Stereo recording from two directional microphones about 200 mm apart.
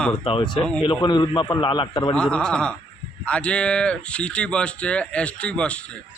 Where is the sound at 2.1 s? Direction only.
5° left (ahead or behind).